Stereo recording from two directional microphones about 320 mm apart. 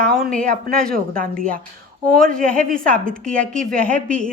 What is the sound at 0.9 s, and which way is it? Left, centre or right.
Speech, right.